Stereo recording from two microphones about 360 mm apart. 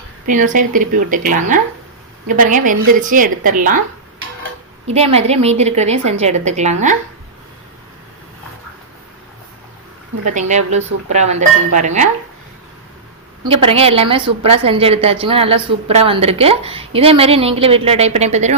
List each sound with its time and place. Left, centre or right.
0.3 s a woman's voice: right
4.9 s a woman's voice: centre
10.2 s a woman's voice: centre
13.4 s a woman's voice: centre